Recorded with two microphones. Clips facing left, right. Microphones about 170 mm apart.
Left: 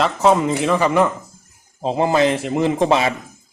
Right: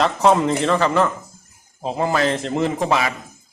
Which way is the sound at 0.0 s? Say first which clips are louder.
Even; centre (ahead or behind).